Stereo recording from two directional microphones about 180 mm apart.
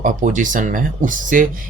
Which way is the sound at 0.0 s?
45° right (ahead or behind).